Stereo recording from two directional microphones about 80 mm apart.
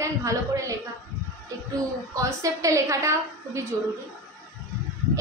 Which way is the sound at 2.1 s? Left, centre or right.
Right.